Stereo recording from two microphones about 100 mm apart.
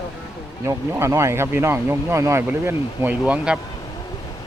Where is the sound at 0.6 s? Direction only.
30° right (ahead or behind).